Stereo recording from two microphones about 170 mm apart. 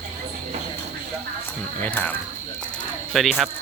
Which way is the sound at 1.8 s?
10° left (ahead or behind).